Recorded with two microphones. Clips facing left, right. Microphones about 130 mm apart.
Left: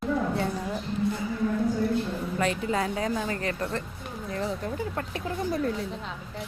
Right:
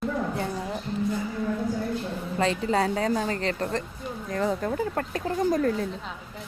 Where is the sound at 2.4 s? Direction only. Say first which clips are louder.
Right 4 dB; 35° right (ahead or behind).